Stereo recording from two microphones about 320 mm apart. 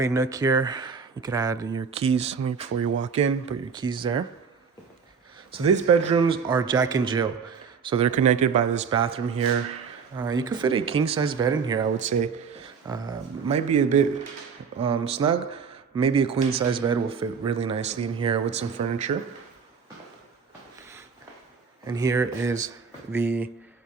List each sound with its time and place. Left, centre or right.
0.0 s speech: centre
2.4 s speech: right
3.4 s speech: centre
6.1 s speech: centre
21.8 s speech: centre